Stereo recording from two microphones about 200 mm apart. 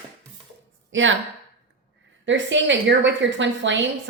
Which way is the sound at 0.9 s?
70° right (ahead or behind).